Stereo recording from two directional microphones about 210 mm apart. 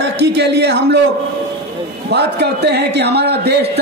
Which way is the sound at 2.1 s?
50° right (ahead or behind).